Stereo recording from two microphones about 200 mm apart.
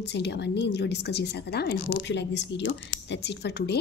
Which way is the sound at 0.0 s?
60° left (ahead or behind).